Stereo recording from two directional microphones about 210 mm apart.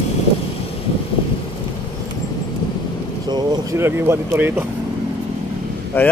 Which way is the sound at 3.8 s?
10° right (ahead or behind).